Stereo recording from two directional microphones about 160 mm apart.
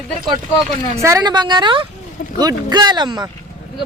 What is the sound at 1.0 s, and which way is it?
Speech, 20° right (ahead or behind).